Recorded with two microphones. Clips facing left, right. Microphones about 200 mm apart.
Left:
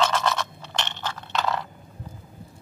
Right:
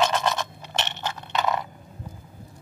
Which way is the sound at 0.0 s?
15° right (ahead or behind).